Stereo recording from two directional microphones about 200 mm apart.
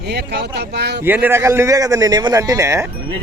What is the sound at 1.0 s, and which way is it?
A man's voice, 10° right (ahead or behind).